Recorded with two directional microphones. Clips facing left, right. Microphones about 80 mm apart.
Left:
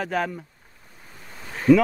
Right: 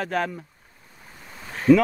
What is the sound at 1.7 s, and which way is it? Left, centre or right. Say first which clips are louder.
Speech: even; centre.